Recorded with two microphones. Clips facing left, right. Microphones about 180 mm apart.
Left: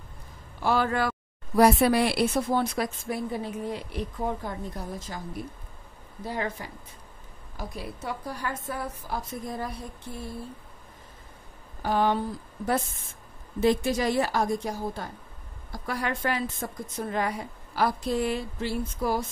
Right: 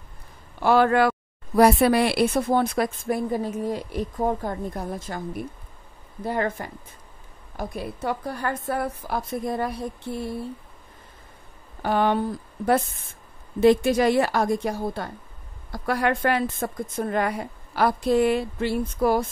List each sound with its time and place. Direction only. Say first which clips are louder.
0.6 s a woman's voice: right 7 dB; 65° right (ahead or behind)
11.8 s a woman's voice: right 3 dB; 65° right (ahead or behind)
13.6 s a woman's voice: right 6 dB; 65° right (ahead or behind)